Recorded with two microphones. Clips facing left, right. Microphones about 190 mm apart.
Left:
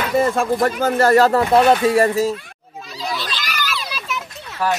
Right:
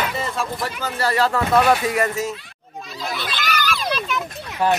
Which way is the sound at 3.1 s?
55° right (ahead or behind).